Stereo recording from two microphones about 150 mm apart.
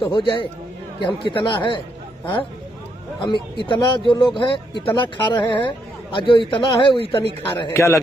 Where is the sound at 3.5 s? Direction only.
30° left (ahead or behind).